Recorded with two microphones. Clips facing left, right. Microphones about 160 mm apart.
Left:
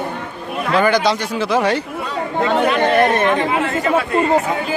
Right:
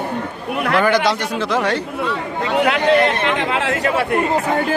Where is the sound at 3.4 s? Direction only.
85° right.